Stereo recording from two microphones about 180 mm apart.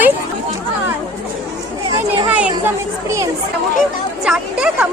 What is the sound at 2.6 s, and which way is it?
Speech, 15° right (ahead or behind).